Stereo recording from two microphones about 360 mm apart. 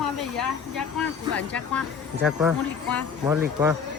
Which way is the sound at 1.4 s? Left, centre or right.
Centre.